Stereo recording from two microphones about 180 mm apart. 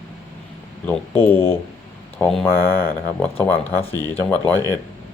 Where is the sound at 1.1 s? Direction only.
10° left (ahead or behind).